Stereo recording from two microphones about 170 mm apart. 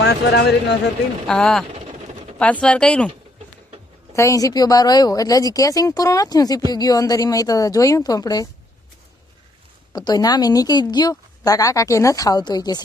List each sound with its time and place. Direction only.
0.0 s speech: 80° left
1.3 s speech: 5° left (ahead or behind)
4.1 s a woman's voice: 20° left (ahead or behind)
9.9 s a woman's voice: 25° left (ahead or behind)